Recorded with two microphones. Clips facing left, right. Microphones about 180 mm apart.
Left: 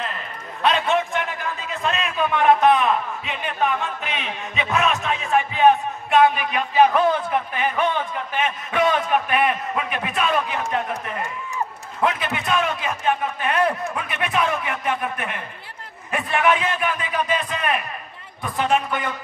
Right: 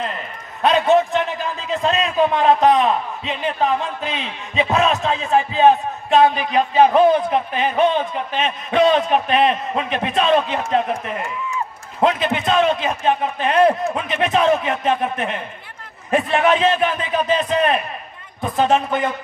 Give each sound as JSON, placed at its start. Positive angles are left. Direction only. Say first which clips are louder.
{"t": 0.6, "sound": "a man's voice", "louder": "right 6 dB", "side_deg": -35}